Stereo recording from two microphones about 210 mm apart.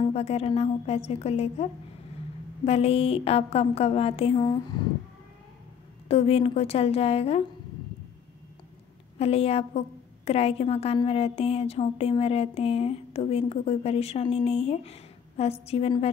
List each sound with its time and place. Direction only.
0.0 s a woman's voice: 30° left (ahead or behind)
6.0 s a woman's voice: 30° left (ahead or behind)
9.2 s a woman's voice: 30° left (ahead or behind)